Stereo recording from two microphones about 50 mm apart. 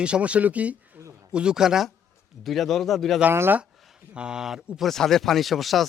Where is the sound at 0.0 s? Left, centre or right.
Right.